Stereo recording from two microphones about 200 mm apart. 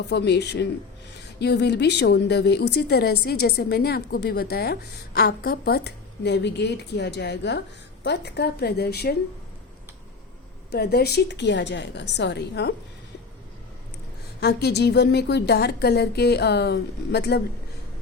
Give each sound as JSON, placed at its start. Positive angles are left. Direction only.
{"t": 0.1, "sound": "a woman's voice", "side_deg": 55}
{"t": 10.7, "sound": "speech", "side_deg": 55}
{"t": 14.4, "sound": "speech", "side_deg": 55}